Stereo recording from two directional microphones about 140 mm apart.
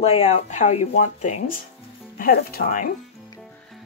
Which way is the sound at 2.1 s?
90° left.